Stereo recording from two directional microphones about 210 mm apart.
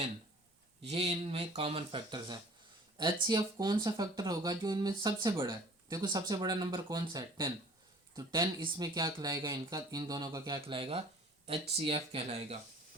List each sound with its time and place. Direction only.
0.8 s speech: 30° right (ahead or behind)